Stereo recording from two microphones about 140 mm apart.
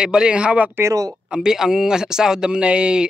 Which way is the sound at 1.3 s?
5° right (ahead or behind).